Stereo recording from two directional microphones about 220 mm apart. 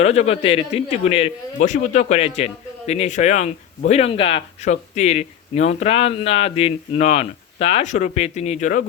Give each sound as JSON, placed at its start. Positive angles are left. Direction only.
{"t": 0.0, "sound": "speech", "side_deg": 30}